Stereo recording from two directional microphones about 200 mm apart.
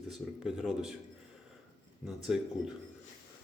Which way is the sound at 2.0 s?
Centre (ahead or behind).